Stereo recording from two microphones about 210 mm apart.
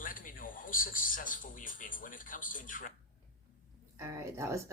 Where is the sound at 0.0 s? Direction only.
40° left (ahead or behind).